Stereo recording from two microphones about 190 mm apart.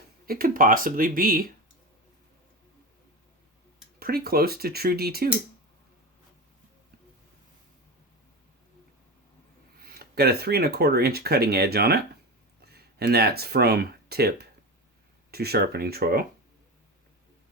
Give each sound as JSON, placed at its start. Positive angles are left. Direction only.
{"t": 0.3, "sound": "speech", "side_deg": -50}
{"t": 4.0, "sound": "speech", "side_deg": -50}
{"t": 9.7, "sound": "speech", "side_deg": -50}